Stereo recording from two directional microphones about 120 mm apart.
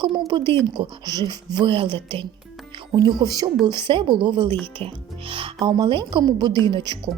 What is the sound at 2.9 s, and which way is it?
A woman's voice, 35° right (ahead or behind).